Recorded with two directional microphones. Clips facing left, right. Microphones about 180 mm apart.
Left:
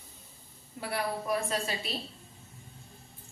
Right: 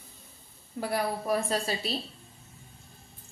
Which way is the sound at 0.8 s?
40° right (ahead or behind).